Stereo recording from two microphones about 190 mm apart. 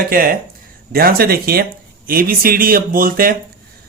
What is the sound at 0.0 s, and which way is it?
Speech, 50° right (ahead or behind).